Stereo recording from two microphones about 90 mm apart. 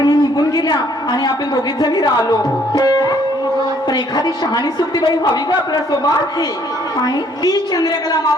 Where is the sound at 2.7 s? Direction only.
50° left (ahead or behind).